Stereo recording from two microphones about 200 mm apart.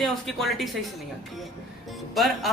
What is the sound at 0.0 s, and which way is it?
Speech, centre (ahead or behind).